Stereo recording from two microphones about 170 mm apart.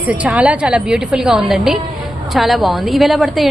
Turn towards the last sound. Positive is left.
turn(degrees=0)  # may be behind; listen again after turning